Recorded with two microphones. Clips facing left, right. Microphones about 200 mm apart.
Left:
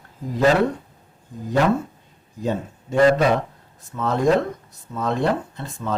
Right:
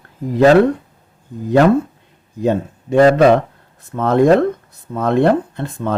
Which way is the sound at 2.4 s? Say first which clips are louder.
Right 8 dB; 65° right (ahead or behind).